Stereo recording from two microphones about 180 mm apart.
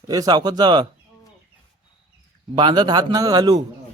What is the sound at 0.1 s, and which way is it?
Speech, 20° right (ahead or behind).